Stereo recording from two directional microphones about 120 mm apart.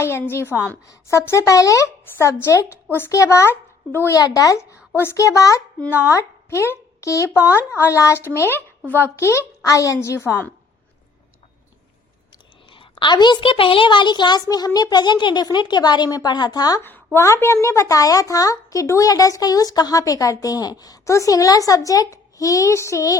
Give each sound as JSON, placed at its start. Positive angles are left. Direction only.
{"t": 0.0, "sound": "speech", "side_deg": 20}
{"t": 12.7, "sound": "a woman's voice", "side_deg": 45}
{"t": 16.8, "sound": "speech", "side_deg": 15}